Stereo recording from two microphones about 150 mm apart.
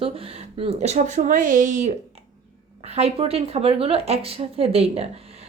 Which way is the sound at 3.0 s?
40° right (ahead or behind).